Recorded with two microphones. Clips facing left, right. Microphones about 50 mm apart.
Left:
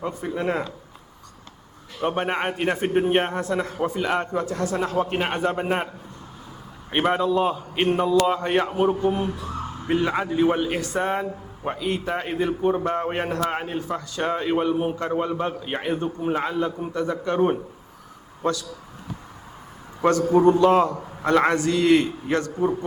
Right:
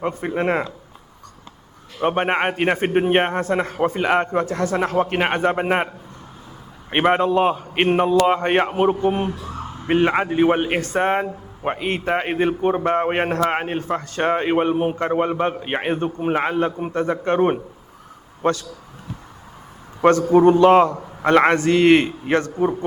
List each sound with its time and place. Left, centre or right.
0.0 s a man's voice: right
2.0 s a man's voice: right
6.9 s a man's voice: right
20.0 s a man's voice: right